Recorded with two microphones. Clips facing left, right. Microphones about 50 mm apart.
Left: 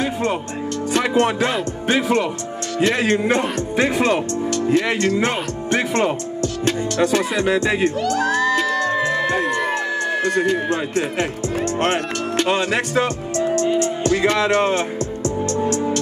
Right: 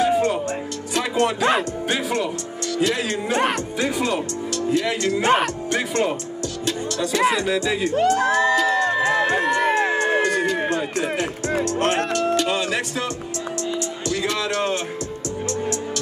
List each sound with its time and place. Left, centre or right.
0.0 s music: left
1.9 s speech: left
6.6 s music: left
7.3 s speech: left
8.0 s speech: right
8.6 s music: right
9.0 s music: right
10.3 s speech: left
12.4 s music: left